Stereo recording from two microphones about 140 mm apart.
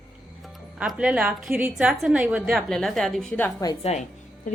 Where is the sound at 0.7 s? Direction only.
5° right (ahead or behind).